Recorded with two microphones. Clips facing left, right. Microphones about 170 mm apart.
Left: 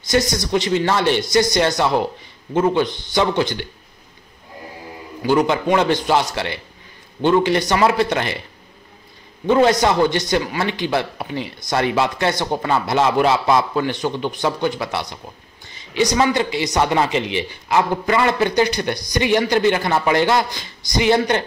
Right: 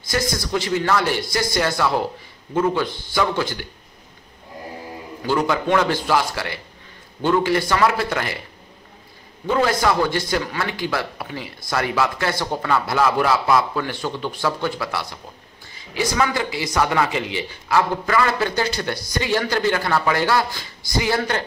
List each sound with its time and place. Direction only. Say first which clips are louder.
0.3 s a man's voice: left 3 dB; 20° left (ahead or behind)
5.2 s a man's voice: left 4 dB; 15° left (ahead or behind)
9.5 s a man's voice: left 4 dB; 20° left (ahead or behind)
16.2 s a man's voice: left 2 dB; 25° left (ahead or behind)